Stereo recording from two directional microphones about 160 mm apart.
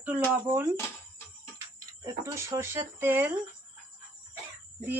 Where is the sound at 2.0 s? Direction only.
20° right (ahead or behind).